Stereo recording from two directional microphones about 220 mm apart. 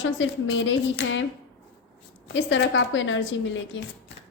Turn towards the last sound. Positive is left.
turn(degrees=55)  # may be behind; listen again after turning